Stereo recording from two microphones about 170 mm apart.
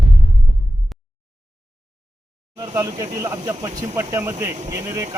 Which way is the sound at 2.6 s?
15° right (ahead or behind).